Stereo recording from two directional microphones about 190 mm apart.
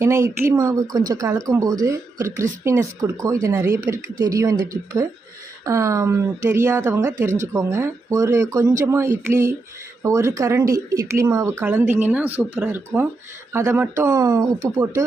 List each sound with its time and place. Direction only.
0.0 s speech: 15° right (ahead or behind)